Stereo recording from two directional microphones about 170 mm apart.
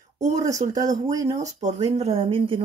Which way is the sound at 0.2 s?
45° right (ahead or behind).